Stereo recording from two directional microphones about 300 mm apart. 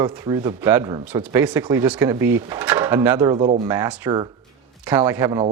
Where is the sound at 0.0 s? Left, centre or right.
Centre.